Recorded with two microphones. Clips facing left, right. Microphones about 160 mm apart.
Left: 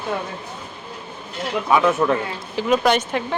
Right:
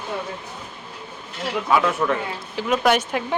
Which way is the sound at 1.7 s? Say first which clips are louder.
Left 3 dB; 20° left (ahead or behind).